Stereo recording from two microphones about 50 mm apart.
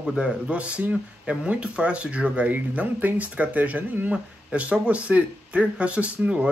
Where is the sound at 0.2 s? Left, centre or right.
Right.